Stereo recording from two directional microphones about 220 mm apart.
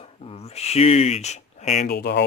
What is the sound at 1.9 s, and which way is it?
Speech, 50° left (ahead or behind).